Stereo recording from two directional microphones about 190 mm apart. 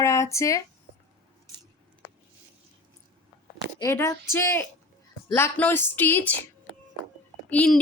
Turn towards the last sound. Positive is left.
turn(degrees=5)  # may be behind; listen again after turning